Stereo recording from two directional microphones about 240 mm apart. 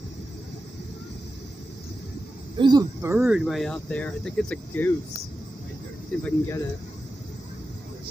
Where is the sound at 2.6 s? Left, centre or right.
Centre.